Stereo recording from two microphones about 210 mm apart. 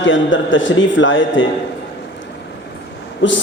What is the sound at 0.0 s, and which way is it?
A man's voice, 60° left (ahead or behind).